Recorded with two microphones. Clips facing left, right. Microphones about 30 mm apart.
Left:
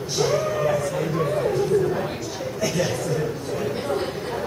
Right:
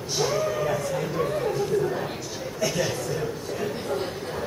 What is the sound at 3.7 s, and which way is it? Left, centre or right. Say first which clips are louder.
Speech: left 4 dB; left.